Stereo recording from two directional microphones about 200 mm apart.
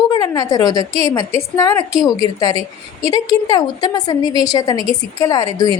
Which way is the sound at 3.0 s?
20° left (ahead or behind).